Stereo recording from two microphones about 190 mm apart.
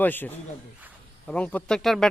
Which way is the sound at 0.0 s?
10° left (ahead or behind).